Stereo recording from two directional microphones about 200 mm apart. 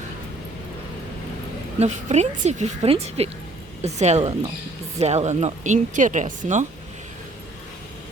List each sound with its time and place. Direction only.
1.8 s speech: 35° right (ahead or behind)